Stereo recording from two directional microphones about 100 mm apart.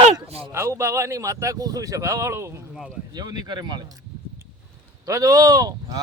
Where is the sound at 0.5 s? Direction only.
25° right (ahead or behind).